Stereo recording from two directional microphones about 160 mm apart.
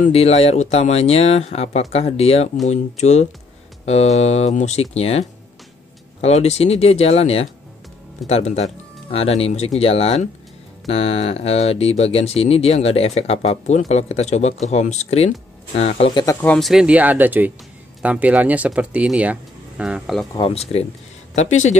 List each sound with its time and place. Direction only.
0.0 s speech: 40° left (ahead or behind)
6.2 s speech: 40° left (ahead or behind)
16.3 s speech: 10° left (ahead or behind)
20.3 s speech: 40° left (ahead or behind)